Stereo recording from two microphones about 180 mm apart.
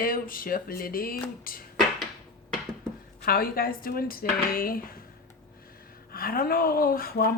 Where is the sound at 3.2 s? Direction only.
55° left (ahead or behind).